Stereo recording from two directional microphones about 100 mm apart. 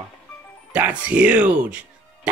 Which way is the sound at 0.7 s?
15° right (ahead or behind).